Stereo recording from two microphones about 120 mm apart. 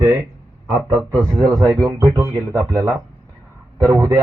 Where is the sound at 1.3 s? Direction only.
35° right (ahead or behind).